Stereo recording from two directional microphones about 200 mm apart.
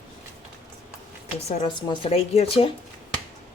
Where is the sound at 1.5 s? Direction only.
25° left (ahead or behind).